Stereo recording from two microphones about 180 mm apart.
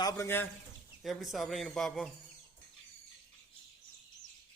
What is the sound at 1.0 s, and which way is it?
A man's voice, centre (ahead or behind).